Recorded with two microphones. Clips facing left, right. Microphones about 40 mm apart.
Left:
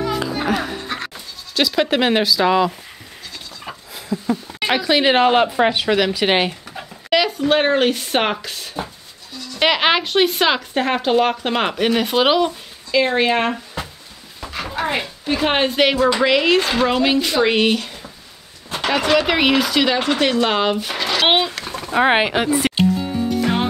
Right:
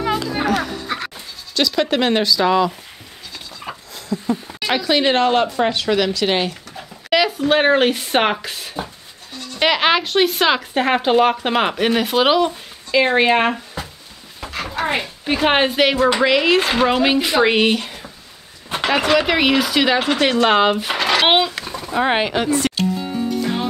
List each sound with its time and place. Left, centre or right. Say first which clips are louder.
1.0 s speech: right 1 dB; centre
3.9 s a sound: even; centre
4.6 s speech: left 1 dB; centre
6.2 s speech: left 2 dB; left
7.1 s speech: even; centre
9.6 s speech: even; centre
12.9 s speech: right 2 dB; centre
14.5 s a sound: right 1 dB; centre
15.2 s speech: right 2 dB; centre
15.7 s speech: even; centre; by 21.2 s right
21.2 s speech: even; centre
21.9 s speech: left 2 dB; centre
22.9 s music: left 1 dB; centre
23.4 s music: left 2 dB; left